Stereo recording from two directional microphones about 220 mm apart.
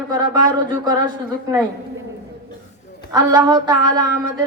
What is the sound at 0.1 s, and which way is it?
Speech, 20° right (ahead or behind).